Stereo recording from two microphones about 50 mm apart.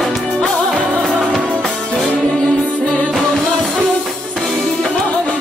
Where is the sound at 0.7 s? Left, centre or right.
Right.